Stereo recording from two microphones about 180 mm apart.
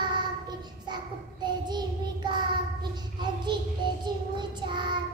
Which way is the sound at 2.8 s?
25° right (ahead or behind).